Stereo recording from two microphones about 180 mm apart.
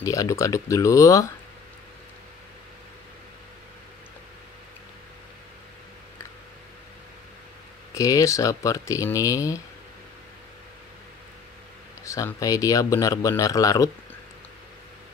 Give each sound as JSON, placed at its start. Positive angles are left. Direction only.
{"t": 0.0, "sound": "a man's voice", "side_deg": 20}
{"t": 7.9, "sound": "a man's voice", "side_deg": 20}
{"t": 12.0, "sound": "a man's voice", "side_deg": 15}